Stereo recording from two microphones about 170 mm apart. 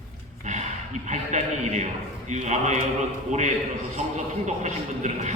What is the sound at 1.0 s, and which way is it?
A man's voice, 45° right (ahead or behind).